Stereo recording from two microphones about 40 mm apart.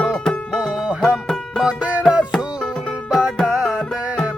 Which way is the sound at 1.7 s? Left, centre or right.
Right.